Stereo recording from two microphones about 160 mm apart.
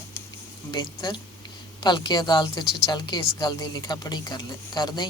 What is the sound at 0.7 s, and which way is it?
A woman's voice, 25° left (ahead or behind).